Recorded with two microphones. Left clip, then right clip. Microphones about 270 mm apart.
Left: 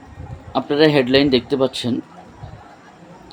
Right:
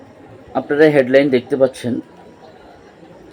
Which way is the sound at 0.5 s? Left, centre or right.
Centre.